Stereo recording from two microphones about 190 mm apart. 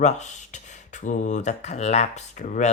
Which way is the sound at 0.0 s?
40° left (ahead or behind).